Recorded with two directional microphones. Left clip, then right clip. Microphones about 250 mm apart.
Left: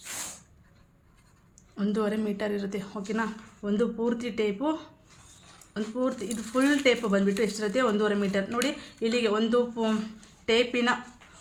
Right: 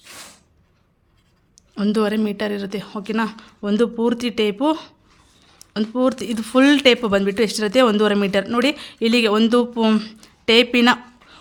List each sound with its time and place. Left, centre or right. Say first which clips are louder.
1.7 s a woman's voice: right 9 dB; right